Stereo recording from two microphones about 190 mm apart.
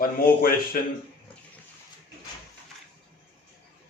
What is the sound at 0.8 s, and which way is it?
Speech, 45° left (ahead or behind).